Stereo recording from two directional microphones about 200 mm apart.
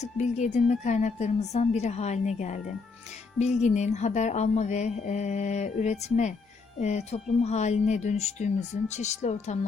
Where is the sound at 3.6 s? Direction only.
35° left (ahead or behind).